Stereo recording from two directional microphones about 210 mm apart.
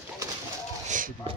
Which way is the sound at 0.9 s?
40° right (ahead or behind).